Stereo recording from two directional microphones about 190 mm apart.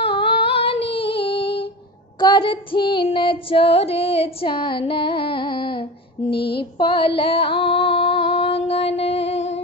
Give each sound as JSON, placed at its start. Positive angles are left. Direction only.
{"t": 0.0, "sound": "female singing", "side_deg": 30}
{"t": 6.3, "sound": "mantra", "side_deg": 60}
{"t": 6.6, "sound": "female singing", "side_deg": 25}
{"t": 7.2, "sound": "a sound", "side_deg": 30}